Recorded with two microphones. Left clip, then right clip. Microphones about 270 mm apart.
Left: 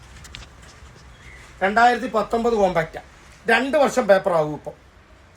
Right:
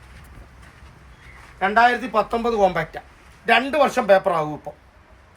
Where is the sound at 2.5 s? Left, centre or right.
Right.